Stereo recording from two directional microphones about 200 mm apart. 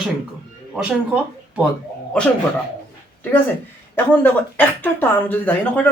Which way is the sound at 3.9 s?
10° left (ahead or behind).